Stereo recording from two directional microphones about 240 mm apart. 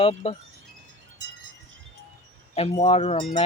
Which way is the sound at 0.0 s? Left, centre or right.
Left.